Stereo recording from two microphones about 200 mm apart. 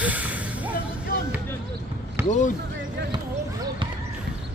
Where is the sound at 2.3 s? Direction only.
40° left (ahead or behind).